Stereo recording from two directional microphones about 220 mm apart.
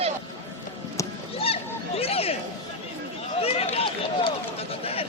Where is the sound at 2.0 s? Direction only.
25° left (ahead or behind).